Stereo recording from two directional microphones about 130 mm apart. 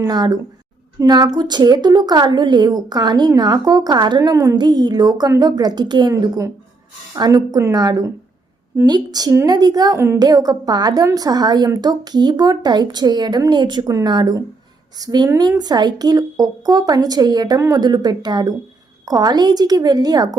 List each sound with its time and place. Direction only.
0.0 s a woman's voice: 30° right (ahead or behind)